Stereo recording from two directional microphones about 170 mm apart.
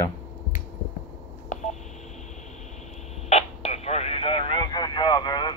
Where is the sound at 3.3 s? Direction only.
40° left (ahead or behind).